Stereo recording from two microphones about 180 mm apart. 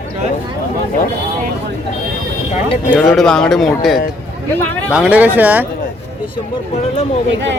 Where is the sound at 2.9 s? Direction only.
5° left (ahead or behind).